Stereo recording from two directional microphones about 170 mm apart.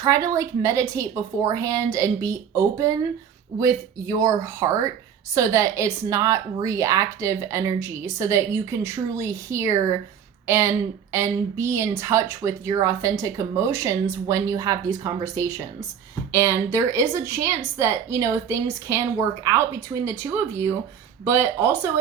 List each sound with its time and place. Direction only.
0.0 s a woman's voice: 20° right (ahead or behind)
20.1 s a woman's voice: 15° right (ahead or behind)